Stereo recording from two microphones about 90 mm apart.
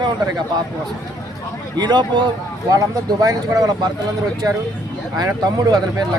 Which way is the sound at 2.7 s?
40° right (ahead or behind).